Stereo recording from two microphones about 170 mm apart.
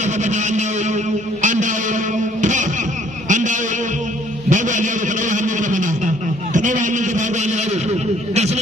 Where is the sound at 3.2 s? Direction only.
45° right (ahead or behind).